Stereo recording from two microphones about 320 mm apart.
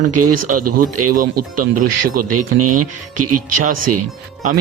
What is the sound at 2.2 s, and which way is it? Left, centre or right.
Speech, right.